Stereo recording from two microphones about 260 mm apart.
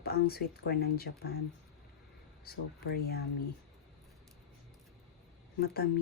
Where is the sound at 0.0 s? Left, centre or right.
Left.